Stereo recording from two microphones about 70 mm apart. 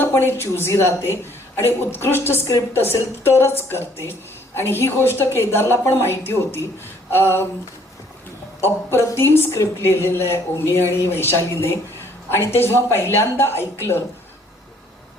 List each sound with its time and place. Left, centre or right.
0.0 s a woman's voice: left
8.6 s a woman's voice: left